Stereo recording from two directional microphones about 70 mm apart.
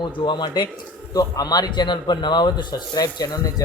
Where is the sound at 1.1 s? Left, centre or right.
Left.